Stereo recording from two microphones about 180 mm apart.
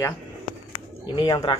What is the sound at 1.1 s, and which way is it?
Speech, 25° left (ahead or behind).